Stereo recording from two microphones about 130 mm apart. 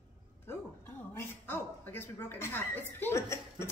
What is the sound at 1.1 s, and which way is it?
A woman's voice, 15° left (ahead or behind).